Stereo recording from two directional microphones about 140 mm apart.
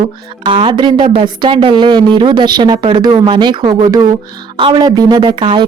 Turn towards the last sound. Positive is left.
turn(degrees=-35)  # may be behind; listen again after turning